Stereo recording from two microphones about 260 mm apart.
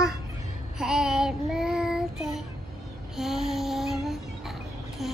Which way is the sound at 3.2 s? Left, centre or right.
Centre.